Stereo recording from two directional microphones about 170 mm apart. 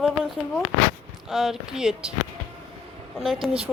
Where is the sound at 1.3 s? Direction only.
Centre (ahead or behind).